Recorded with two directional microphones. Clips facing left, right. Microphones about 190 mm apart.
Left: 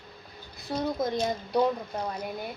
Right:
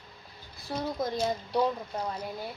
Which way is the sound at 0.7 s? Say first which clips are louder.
Left 3 dB; 20° left (ahead or behind).